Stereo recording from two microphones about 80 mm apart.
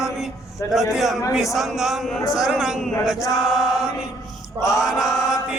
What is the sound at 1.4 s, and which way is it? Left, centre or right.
Chant, centre.